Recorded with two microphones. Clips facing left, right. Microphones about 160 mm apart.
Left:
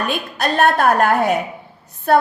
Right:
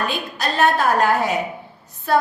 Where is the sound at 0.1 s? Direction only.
55° left (ahead or behind).